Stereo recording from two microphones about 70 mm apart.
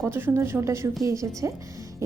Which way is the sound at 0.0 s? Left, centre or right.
Right.